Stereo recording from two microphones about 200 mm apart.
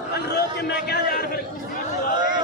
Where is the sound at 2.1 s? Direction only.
20° right (ahead or behind).